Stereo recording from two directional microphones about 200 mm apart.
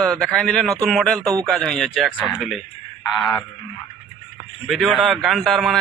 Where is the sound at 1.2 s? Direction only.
15° right (ahead or behind).